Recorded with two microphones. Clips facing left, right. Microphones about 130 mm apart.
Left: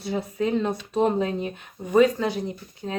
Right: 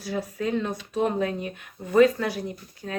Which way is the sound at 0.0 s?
25° left (ahead or behind).